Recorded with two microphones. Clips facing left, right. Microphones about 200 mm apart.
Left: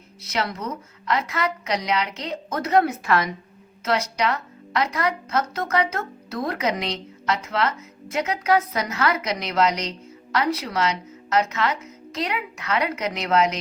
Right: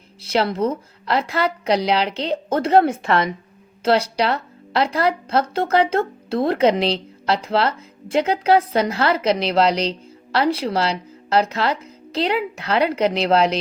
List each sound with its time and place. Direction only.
0.2 s a woman's voice: 30° right (ahead or behind)